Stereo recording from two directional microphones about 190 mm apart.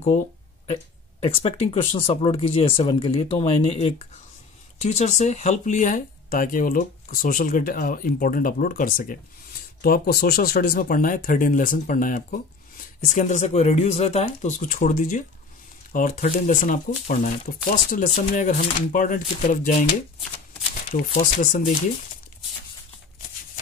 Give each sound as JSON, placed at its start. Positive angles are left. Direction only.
{"t": 1.2, "sound": "speech", "side_deg": 30}